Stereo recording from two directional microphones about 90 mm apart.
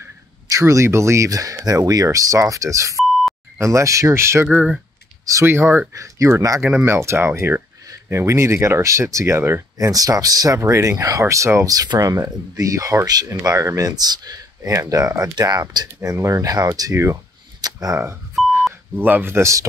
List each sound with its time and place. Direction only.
0.5 s speech: 35° right (ahead or behind)
3.1 s beep: centre (ahead or behind)
3.5 s speech: 35° right (ahead or behind)
5.5 s speech: 25° right (ahead or behind)
5.9 s speech: 35° right (ahead or behind)
9.8 s speech: 40° right (ahead or behind)
14.6 s speech: 35° right (ahead or behind); by 15.9 s 50° right (ahead or behind)
16.0 s speech: 35° right (ahead or behind)
17.6 s a sound: 45° right (ahead or behind)
18.4 s beep: centre (ahead or behind)
18.9 s speech: 20° right (ahead or behind)